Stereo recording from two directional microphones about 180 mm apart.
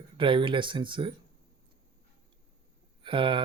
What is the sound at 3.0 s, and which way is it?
Speech, 30° right (ahead or behind).